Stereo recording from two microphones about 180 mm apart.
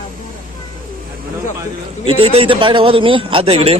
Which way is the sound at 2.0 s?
30° right (ahead or behind).